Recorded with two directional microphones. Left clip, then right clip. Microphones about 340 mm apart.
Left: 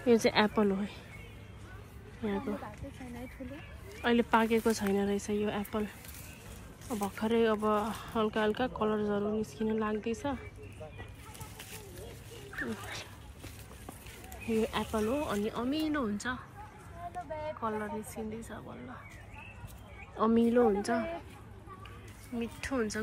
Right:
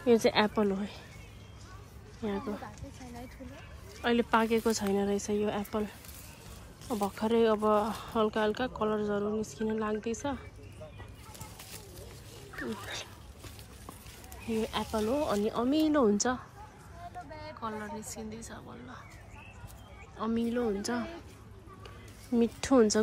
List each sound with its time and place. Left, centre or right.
0.0 s speech: centre
2.2 s speech: centre
4.0 s speech: centre
14.4 s speech: centre
17.6 s speech: centre
20.2 s speech: centre
22.4 s speech: centre